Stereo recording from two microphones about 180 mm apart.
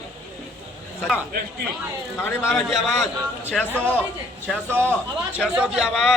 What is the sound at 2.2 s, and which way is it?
Speech, 15° left (ahead or behind).